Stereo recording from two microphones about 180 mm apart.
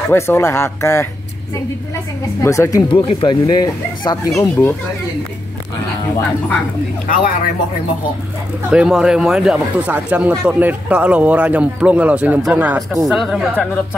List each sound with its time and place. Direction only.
0.1 s speech: 15° left (ahead or behind)
2.4 s speech: 15° left (ahead or behind)
8.6 s speech: 5° right (ahead or behind)